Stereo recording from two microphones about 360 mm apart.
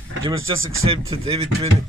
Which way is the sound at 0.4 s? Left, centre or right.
Right.